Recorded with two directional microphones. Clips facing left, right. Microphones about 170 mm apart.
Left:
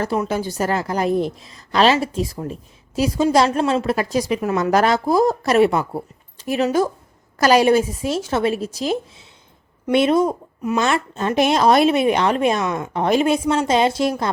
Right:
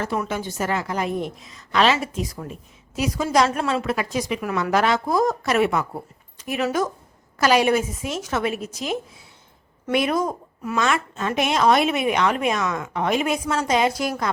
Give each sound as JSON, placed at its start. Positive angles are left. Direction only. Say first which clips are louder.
{"t": 0.3, "sound": "a woman's voice", "louder": "left 4 dB", "side_deg": 35}
{"t": 10.8, "sound": "a woman's voice", "louder": "left 2 dB", "side_deg": 35}